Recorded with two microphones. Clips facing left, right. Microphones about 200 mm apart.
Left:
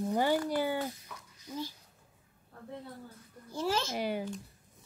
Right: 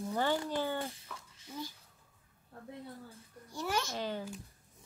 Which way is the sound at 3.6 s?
25° left (ahead or behind).